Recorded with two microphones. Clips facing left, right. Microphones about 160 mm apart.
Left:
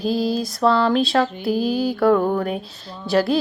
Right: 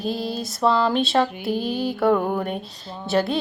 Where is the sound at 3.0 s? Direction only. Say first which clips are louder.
Left 3 dB; centre (ahead or behind).